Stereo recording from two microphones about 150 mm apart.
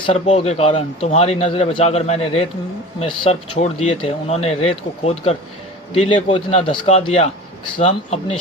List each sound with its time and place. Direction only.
0.0 s a man's voice: 45° left (ahead or behind)